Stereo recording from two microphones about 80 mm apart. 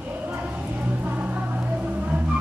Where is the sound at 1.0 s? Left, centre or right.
Centre.